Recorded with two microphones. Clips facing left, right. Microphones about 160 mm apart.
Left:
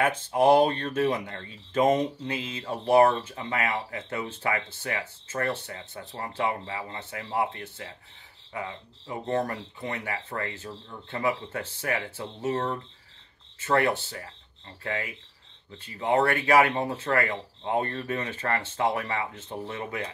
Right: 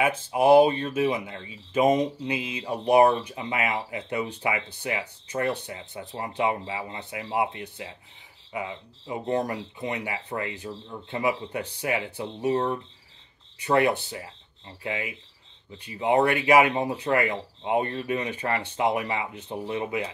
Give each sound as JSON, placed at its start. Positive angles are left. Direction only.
{"t": 0.0, "sound": "speech", "side_deg": -10}